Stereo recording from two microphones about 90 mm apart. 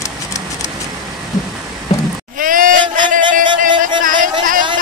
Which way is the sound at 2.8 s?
60° right (ahead or behind).